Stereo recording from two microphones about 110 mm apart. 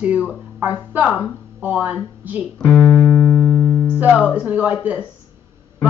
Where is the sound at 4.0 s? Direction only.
10° right (ahead or behind).